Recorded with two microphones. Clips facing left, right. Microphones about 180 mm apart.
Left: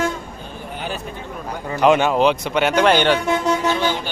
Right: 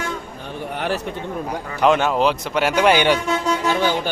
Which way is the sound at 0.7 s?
70° right (ahead or behind).